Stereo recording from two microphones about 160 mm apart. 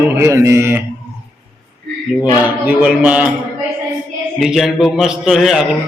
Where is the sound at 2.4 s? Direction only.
10° right (ahead or behind).